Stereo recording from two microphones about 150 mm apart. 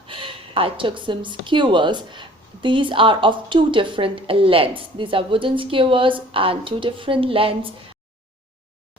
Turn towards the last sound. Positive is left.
turn(degrees=-35)  # may be behind; listen again after turning